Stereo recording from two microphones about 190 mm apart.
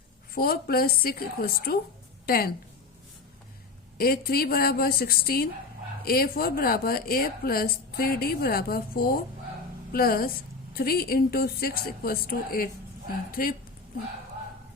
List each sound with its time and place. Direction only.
0.3 s a woman's voice: 50° left (ahead or behind)
3.9 s a woman's voice: 50° left (ahead or behind)